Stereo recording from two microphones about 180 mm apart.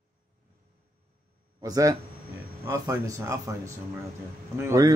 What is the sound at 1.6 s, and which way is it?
A man's voice, 20° right (ahead or behind).